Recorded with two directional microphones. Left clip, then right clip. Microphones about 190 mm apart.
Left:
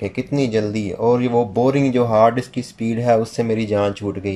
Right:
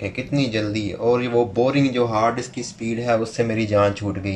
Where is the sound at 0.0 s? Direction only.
30° left (ahead or behind).